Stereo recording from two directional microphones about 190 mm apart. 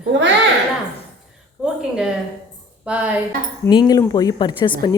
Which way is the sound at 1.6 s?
5° right (ahead or behind).